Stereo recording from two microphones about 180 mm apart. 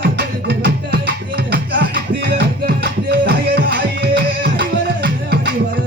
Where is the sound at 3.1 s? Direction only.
65° right (ahead or behind).